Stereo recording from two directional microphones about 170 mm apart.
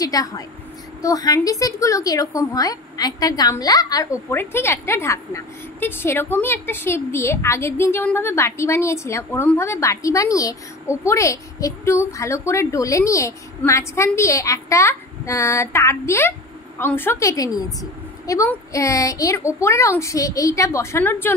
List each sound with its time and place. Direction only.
0.0 s a woman's voice: 20° left (ahead or behind)